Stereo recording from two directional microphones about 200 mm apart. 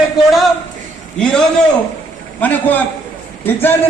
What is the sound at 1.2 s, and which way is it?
A man's voice, 5° left (ahead or behind).